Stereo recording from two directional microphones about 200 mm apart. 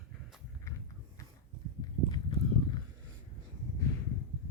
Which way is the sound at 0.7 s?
15° left (ahead or behind).